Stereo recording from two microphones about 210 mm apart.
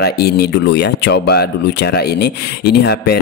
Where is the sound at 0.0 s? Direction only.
50° left (ahead or behind).